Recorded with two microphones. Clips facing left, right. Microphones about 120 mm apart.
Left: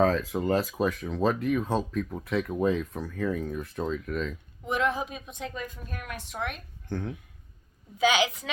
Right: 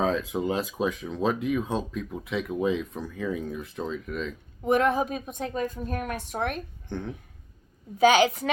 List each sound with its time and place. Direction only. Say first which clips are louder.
0.0 s speech: left 1 dB; 5° right (ahead or behind)
4.6 s a woman's voice: right 5 dB; 50° right (ahead or behind)
6.8 s a child's voice: left 2 dB; 5° left (ahead or behind)
7.9 s a woman's voice: right 5 dB; 45° right (ahead or behind)